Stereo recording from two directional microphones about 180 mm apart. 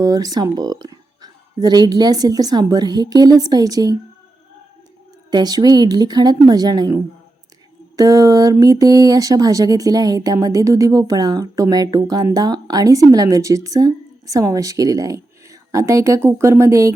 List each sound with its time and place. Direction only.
0.0 s speech: 20° right (ahead or behind)
5.3 s speech: 20° right (ahead or behind)